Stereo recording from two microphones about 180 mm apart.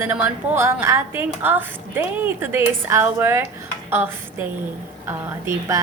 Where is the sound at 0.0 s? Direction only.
10° right (ahead or behind).